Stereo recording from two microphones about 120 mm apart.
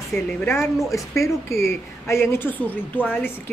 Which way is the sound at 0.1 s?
20° left (ahead or behind).